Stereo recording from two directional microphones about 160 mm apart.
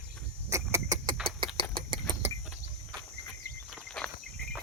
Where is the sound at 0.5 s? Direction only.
20° right (ahead or behind).